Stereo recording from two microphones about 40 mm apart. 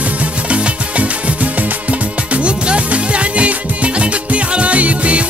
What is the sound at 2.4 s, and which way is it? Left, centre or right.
Music, right.